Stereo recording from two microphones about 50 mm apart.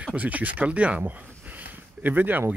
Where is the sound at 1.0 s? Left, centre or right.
Right.